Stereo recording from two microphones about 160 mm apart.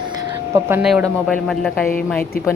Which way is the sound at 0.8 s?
5° right (ahead or behind).